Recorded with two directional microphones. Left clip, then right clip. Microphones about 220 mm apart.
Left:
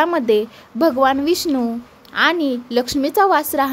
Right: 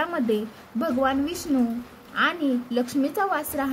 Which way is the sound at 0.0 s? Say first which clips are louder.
Left 9 dB; 45° left (ahead or behind).